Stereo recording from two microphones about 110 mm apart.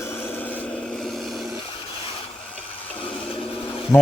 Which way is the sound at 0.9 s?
Centre (ahead or behind).